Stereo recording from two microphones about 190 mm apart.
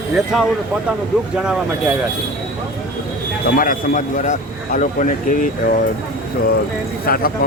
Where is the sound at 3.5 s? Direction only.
45° left (ahead or behind).